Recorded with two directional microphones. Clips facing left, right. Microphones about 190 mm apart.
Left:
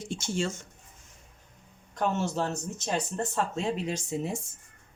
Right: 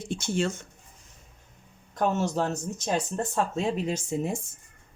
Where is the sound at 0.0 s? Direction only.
55° right (ahead or behind).